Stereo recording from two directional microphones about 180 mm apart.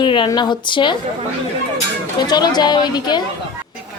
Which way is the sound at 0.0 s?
25° left (ahead or behind).